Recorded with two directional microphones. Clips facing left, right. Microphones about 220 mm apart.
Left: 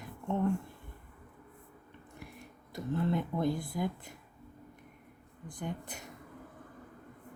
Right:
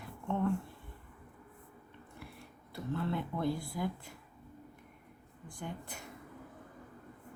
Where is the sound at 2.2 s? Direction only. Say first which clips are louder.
Left 2 dB; 15° left (ahead or behind).